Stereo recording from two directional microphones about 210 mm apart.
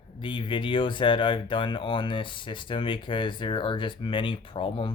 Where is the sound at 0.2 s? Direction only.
25° left (ahead or behind).